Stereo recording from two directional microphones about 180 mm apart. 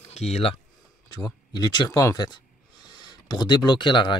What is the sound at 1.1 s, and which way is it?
Speech, 20° left (ahead or behind).